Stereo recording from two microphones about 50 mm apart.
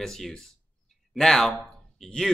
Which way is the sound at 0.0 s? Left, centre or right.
Centre.